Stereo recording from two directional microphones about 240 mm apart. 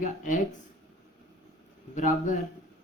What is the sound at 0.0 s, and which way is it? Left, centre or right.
Speech, left.